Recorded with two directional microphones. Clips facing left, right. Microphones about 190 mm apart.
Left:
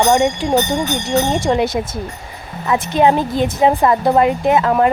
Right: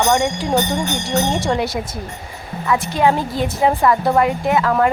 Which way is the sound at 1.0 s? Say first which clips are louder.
Left 3 dB; 20° left (ahead or behind).